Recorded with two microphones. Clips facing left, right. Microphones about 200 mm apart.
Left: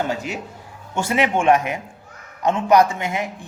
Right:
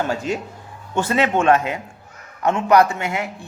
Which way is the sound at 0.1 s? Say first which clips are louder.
Right 3 dB; 15° left (ahead or behind).